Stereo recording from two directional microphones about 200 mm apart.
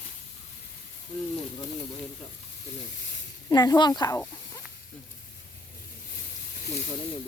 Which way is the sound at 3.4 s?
20° left (ahead or behind).